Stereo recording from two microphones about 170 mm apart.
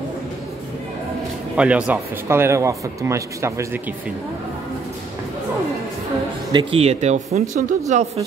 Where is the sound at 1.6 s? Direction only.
5° right (ahead or behind).